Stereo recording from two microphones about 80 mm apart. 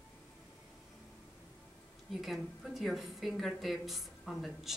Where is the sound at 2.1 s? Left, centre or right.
Centre.